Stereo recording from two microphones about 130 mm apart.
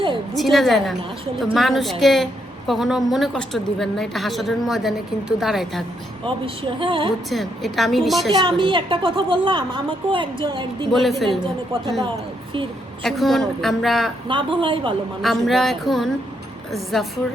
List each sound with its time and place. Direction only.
0.3 s a woman's voice: centre (ahead or behind)
6.2 s a woman's voice: 40° right (ahead or behind)
7.3 s a woman's voice: centre (ahead or behind)
8.4 s a woman's voice: 40° right (ahead or behind)
10.9 s a woman's voice: centre (ahead or behind)
13.0 s a woman's voice: centre (ahead or behind)
14.3 s a woman's voice: 40° right (ahead or behind)
15.2 s a woman's voice: centre (ahead or behind)